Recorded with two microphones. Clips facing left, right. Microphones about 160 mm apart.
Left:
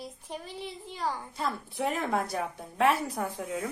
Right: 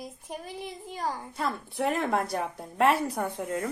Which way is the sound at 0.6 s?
50° right (ahead or behind).